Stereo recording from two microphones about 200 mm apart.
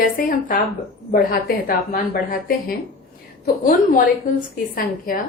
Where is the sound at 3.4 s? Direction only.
45° left (ahead or behind).